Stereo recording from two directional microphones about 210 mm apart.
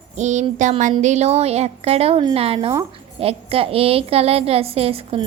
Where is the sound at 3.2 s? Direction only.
25° right (ahead or behind).